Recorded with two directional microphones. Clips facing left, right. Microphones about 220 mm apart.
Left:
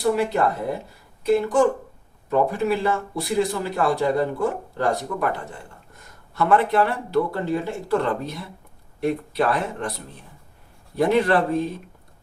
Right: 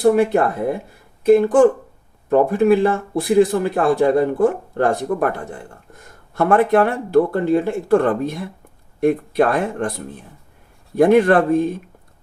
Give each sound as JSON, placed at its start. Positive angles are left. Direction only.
{"t": 0.0, "sound": "speech", "side_deg": -50}
{"t": 10.9, "sound": "speech", "side_deg": -50}